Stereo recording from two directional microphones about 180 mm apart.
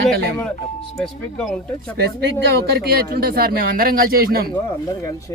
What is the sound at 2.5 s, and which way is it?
Speech, 60° right (ahead or behind).